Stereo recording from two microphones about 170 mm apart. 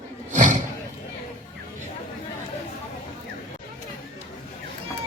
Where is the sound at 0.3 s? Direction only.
45° right (ahead or behind).